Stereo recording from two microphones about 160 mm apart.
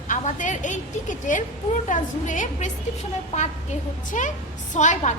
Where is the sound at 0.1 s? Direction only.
50° left (ahead or behind).